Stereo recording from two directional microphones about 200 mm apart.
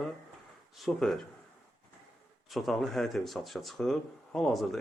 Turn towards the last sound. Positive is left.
turn(degrees=0)  # may be behind; listen again after turning